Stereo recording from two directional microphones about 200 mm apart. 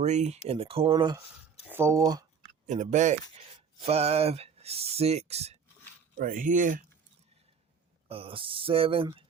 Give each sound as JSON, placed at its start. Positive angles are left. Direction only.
{"t": 0.0, "sound": "speech", "side_deg": -35}
{"t": 2.6, "sound": "speech", "side_deg": -35}
{"t": 6.1, "sound": "speech", "side_deg": -45}
{"t": 8.0, "sound": "speech", "side_deg": -30}